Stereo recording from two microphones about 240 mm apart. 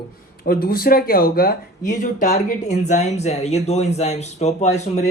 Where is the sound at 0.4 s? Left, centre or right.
Left.